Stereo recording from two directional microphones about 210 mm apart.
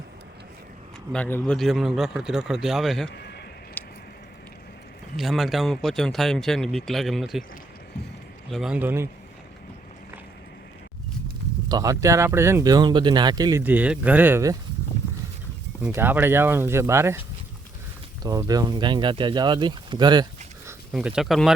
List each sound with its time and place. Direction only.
1.1 s speech: 10° left (ahead or behind)
3.1 s a sound: 55° left (ahead or behind)
3.8 s a sound: 10° left (ahead or behind)
5.1 s speech: centre (ahead or behind)
8.4 s speech: centre (ahead or behind)
11.7 s speech: 15° right (ahead or behind)
15.8 s speech: 10° right (ahead or behind)
18.2 s speech: 15° right (ahead or behind)
20.9 s speech: 5° right (ahead or behind)